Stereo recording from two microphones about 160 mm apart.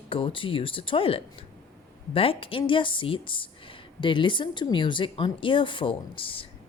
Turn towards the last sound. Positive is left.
turn(degrees=35)  # may be behind; listen again after turning